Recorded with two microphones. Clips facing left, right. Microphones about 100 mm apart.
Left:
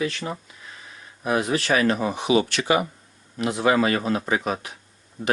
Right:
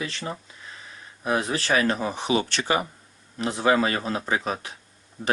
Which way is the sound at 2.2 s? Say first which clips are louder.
Left 4 dB; 35° right (ahead or behind).